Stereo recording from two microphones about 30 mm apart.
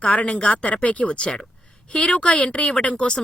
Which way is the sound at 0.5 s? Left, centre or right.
Left.